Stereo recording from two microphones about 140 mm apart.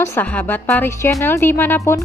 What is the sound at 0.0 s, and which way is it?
Speech, 15° left (ahead or behind).